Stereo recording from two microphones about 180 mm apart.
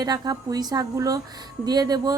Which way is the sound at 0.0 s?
20° right (ahead or behind).